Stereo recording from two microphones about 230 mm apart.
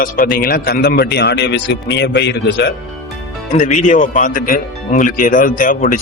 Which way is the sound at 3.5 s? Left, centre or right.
Left.